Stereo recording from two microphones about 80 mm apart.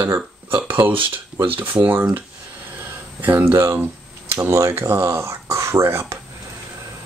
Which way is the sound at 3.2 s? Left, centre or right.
Right.